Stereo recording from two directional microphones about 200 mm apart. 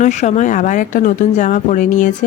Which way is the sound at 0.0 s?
35° left (ahead or behind).